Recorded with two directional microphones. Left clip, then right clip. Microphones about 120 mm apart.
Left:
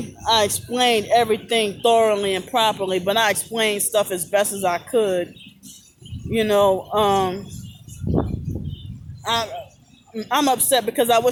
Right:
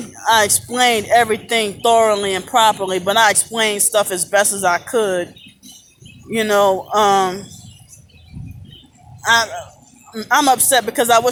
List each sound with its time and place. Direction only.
0.3 s speech: 10° left (ahead or behind)
6.3 s speech: 15° left (ahead or behind)
9.2 s speech: 15° left (ahead or behind)